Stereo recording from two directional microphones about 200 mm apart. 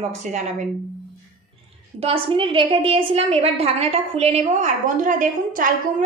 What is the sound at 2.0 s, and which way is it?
A woman's voice, 25° right (ahead or behind).